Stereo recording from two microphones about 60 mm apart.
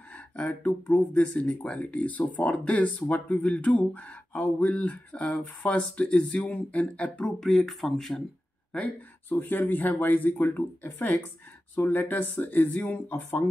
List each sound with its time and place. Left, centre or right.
0.5 s speech: left
7.2 s speech: centre
8.7 s speech: left